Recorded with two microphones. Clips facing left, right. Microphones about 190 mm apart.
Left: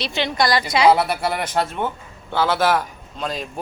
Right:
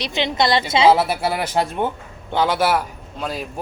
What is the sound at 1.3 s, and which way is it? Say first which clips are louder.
A woman's voice: right 1 dB; 10° right (ahead or behind).